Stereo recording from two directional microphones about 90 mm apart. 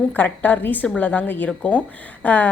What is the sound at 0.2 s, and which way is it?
A woman's voice, 20° left (ahead or behind).